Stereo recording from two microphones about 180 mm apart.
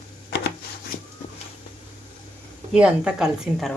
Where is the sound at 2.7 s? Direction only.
5° right (ahead or behind).